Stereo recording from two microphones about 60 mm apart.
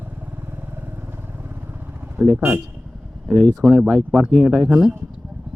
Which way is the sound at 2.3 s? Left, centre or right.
Right.